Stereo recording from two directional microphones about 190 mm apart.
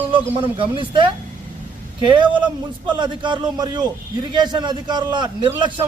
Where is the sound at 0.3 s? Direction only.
25° right (ahead or behind).